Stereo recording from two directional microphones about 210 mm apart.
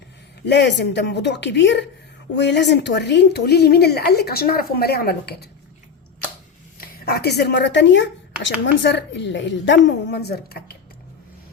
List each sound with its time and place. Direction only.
0.4 s a woman's voice: 55° left (ahead or behind)
6.7 s a woman's voice: 50° left (ahead or behind)